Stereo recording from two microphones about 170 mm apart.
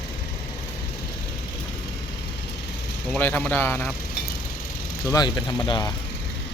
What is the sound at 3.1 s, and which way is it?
Speech, 10° left (ahead or behind).